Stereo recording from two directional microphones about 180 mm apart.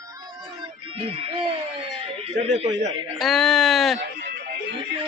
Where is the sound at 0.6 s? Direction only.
30° right (ahead or behind).